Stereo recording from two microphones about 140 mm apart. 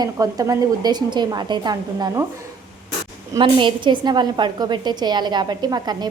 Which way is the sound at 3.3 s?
35° right (ahead or behind).